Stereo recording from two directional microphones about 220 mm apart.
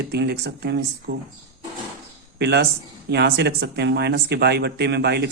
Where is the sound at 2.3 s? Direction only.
50° right (ahead or behind).